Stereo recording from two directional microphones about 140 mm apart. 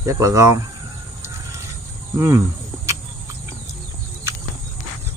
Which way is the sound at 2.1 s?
20° right (ahead or behind).